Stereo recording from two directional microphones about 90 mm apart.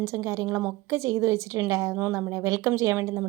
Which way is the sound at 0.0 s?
30° right (ahead or behind).